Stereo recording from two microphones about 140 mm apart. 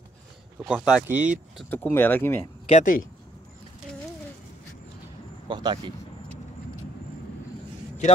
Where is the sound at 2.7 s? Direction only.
55° left (ahead or behind).